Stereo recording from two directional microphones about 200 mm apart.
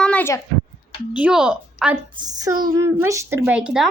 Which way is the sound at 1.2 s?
5° right (ahead or behind).